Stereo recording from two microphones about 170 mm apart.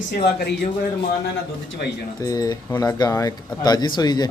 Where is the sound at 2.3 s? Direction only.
20° left (ahead or behind).